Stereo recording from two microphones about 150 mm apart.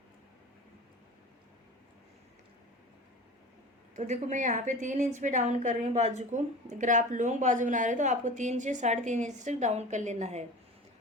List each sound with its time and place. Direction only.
3.9 s a woman's voice: 55° right (ahead or behind)